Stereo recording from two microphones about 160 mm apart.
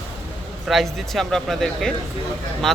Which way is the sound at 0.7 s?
Centre (ahead or behind).